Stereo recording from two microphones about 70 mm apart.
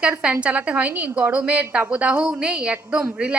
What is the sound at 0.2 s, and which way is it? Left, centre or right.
A woman's voice, centre.